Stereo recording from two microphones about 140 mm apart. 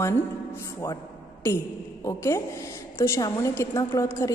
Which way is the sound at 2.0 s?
20° left (ahead or behind).